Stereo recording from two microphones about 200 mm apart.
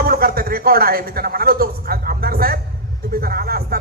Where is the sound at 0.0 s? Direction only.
50° right (ahead or behind).